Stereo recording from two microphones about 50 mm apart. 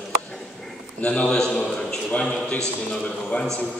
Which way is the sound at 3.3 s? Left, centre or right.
Left.